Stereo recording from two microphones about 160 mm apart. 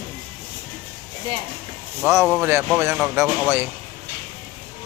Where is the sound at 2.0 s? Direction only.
15° right (ahead or behind).